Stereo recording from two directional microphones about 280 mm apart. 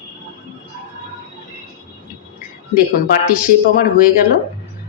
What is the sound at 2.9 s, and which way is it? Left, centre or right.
Speech, left.